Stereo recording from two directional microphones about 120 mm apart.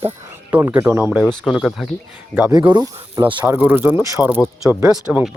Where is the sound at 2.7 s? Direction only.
35° right (ahead or behind).